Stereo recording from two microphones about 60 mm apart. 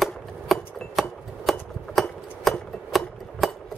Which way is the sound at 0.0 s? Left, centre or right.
Centre.